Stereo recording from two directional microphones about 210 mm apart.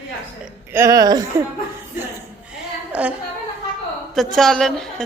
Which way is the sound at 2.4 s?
5° right (ahead or behind).